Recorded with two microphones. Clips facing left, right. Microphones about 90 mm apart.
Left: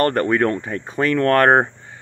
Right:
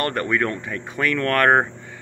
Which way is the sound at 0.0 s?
40° left (ahead or behind).